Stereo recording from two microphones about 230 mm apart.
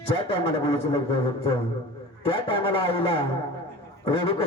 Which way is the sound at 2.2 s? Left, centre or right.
Left.